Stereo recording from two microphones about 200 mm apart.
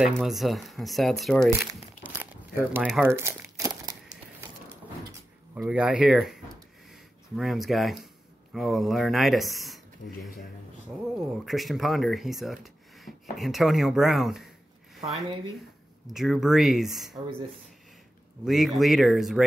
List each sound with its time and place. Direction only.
0.0 s speech: centre (ahead or behind)
1.7 s crumpling: 10° right (ahead or behind)
5.5 s speech: 5° right (ahead or behind)
11.1 s speech: centre (ahead or behind)
18.4 s speech: centre (ahead or behind)